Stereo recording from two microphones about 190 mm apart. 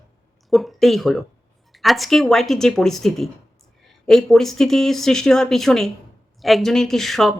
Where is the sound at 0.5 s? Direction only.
Centre (ahead or behind).